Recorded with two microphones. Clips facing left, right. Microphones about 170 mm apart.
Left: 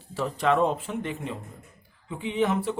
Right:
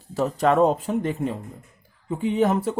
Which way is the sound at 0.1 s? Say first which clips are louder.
Right 4 dB; 40° right (ahead or behind).